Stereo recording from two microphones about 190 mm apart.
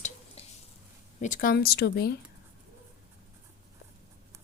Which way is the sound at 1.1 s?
40° left (ahead or behind).